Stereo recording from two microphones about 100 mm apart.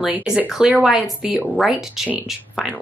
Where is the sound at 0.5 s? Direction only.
5° right (ahead or behind).